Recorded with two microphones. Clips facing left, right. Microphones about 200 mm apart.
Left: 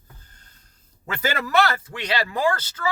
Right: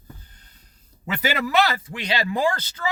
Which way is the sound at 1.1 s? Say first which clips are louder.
Even; 10° right (ahead or behind).